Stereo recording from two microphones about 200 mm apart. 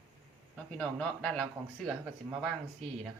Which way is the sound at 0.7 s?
5° left (ahead or behind).